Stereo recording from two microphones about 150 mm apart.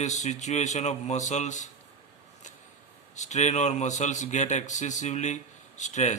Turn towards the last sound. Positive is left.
turn(degrees=50)  # may be behind; listen again after turning